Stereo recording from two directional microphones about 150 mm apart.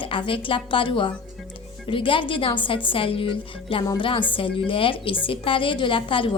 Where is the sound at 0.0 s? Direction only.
35° left (ahead or behind).